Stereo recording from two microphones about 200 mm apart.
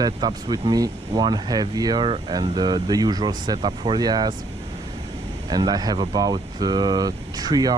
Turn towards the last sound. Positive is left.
turn(degrees=-20)  # may be behind; listen again after turning